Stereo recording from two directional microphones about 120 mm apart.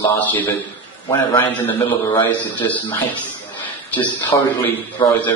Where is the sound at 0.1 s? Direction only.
15° left (ahead or behind).